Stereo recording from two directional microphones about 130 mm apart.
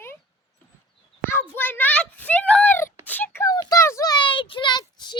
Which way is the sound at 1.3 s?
15° left (ahead or behind).